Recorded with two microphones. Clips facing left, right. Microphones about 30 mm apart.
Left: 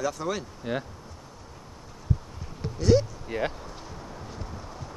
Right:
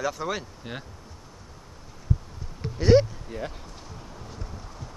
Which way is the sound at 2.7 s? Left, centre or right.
Right.